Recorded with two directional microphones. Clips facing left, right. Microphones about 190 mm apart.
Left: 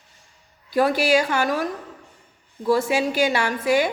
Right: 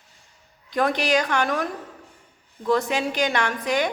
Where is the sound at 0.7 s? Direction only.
5° left (ahead or behind).